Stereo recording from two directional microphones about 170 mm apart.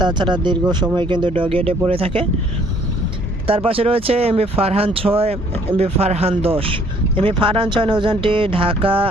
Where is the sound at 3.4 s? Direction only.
35° right (ahead or behind).